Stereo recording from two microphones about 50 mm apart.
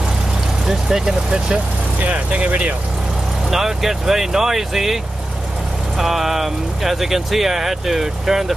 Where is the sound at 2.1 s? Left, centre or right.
Right.